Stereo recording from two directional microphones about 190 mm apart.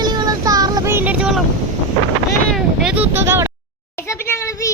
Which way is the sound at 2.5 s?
5° right (ahead or behind).